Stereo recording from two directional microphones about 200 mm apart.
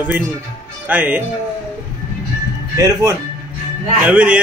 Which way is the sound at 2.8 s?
15° right (ahead or behind).